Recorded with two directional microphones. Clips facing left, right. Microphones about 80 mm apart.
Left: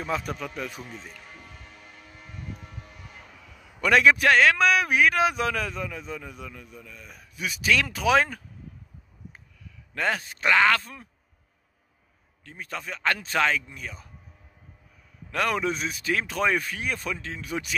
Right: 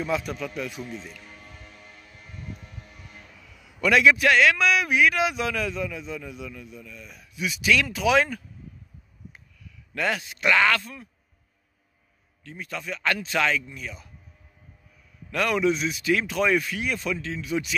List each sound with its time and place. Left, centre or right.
0.0 s a man's voice: left
3.5 s a man's voice: left
9.9 s a man's voice: left
12.4 s a man's voice: left
15.3 s a man's voice: left